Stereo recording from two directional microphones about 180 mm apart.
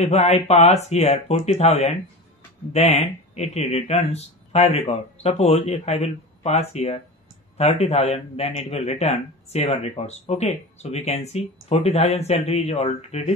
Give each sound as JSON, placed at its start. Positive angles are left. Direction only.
{"t": 0.0, "sound": "a man's voice", "side_deg": 35}